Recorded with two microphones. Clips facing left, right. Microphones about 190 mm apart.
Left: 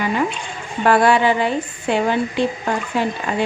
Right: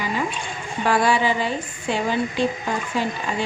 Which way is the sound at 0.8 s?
60° left (ahead or behind).